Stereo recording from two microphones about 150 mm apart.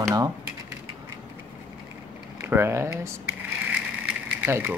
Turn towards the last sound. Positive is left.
turn(degrees=-10)  # may be behind; listen again after turning